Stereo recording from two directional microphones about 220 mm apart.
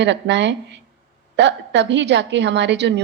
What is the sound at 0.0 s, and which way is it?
A woman's voice, 50° right (ahead or behind).